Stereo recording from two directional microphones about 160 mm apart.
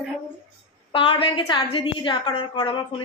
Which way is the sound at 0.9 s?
30° left (ahead or behind).